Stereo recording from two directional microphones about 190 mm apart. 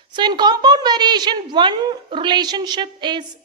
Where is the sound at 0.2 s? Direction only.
25° right (ahead or behind).